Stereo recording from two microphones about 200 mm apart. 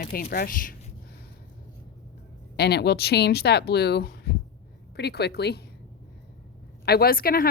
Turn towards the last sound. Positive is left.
turn(degrees=50)  # may be behind; listen again after turning